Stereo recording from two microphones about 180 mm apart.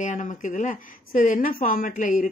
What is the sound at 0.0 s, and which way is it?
A woman's voice, 45° left (ahead or behind).